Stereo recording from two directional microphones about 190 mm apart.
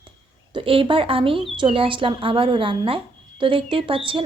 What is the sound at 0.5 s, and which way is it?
Speech, 30° right (ahead or behind).